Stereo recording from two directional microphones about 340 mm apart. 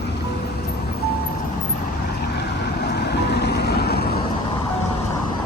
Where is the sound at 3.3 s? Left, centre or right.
Left.